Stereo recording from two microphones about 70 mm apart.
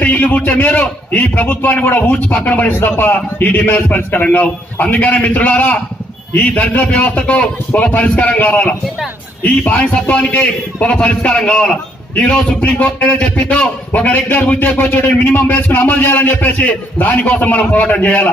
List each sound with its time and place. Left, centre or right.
0.0 s a man's voice: left